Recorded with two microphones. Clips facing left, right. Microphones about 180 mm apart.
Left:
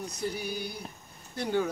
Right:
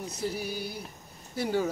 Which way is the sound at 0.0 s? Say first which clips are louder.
Right 1 dB; 5° right (ahead or behind).